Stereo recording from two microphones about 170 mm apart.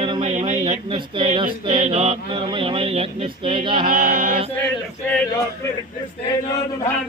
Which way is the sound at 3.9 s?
60° right (ahead or behind).